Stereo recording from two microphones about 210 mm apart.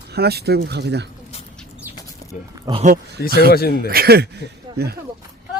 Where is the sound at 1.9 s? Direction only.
10° right (ahead or behind).